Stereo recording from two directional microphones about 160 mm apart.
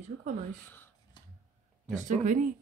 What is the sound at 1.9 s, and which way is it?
Speech, 50° right (ahead or behind).